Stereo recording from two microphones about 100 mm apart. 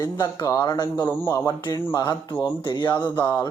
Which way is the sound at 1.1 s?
20° left (ahead or behind).